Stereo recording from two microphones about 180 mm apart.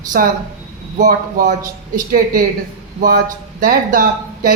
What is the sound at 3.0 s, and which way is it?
A man's voice, 50° right (ahead or behind).